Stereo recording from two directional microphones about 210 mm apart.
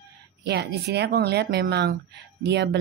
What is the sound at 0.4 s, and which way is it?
A woman's voice, 55° right (ahead or behind).